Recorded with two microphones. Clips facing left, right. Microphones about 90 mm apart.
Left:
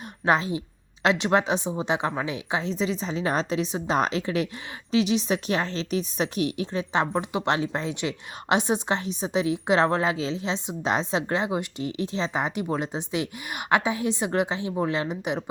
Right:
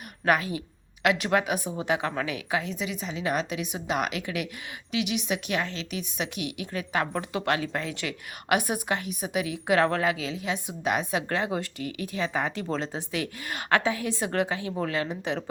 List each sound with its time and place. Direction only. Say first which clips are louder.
0.3 s a woman's voice: left 2 dB; 25° left (ahead or behind)